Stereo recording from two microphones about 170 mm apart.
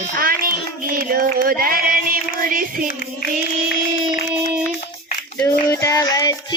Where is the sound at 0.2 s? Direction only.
60° right (ahead or behind).